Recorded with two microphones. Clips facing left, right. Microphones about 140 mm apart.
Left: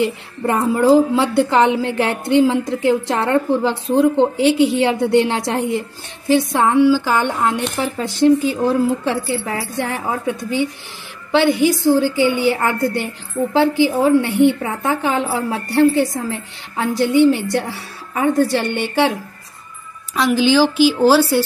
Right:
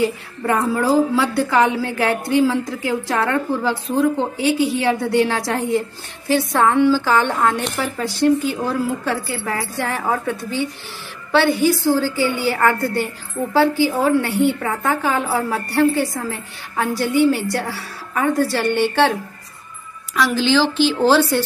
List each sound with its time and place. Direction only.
0.5 s a woman's voice: 25° left (ahead or behind)
20.2 s speech: 15° left (ahead or behind)